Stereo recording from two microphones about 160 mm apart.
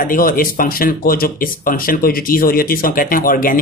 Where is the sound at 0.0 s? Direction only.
60° left (ahead or behind).